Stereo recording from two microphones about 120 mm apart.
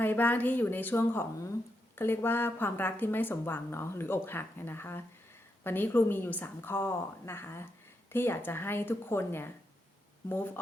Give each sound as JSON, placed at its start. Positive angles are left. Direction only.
{"t": 0.0, "sound": "a woman's voice", "side_deg": 15}